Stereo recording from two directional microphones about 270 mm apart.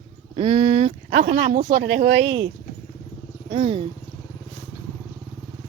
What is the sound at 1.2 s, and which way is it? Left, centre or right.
Speech, right.